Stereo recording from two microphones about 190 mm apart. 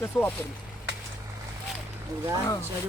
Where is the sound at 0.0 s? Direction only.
10° left (ahead or behind).